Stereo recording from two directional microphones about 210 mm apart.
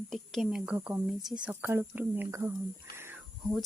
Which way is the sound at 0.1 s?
Centre (ahead or behind).